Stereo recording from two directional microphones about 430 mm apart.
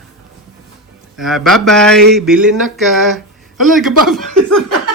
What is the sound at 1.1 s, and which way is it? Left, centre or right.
Speech, centre.